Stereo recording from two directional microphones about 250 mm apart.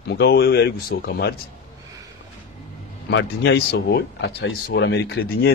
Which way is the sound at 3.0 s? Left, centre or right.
Left.